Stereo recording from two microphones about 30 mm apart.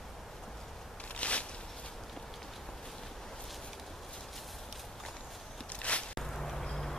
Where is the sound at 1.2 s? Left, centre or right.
Left.